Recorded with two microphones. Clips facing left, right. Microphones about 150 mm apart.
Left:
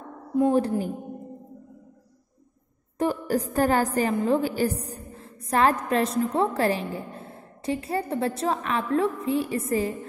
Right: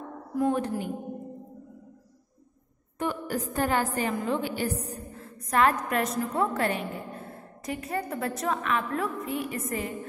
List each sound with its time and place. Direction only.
0.3 s a woman's voice: 30° left (ahead or behind)
3.0 s a woman's voice: 35° left (ahead or behind)